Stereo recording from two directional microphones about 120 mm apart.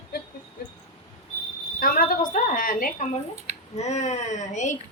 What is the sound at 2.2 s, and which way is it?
Speech, 90° left.